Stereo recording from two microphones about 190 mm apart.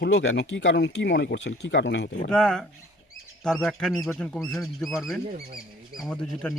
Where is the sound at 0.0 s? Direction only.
65° left (ahead or behind).